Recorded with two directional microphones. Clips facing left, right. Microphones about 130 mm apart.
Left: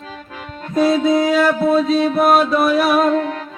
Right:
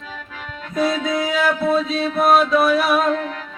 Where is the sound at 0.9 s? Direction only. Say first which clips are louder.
Left 7 dB; 30° left (ahead or behind).